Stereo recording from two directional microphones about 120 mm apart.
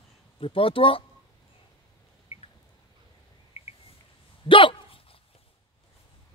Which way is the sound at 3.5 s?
60° left (ahead or behind).